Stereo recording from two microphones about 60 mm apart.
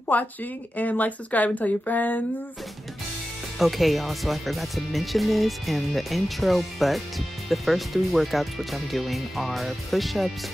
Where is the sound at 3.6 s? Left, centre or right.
Centre.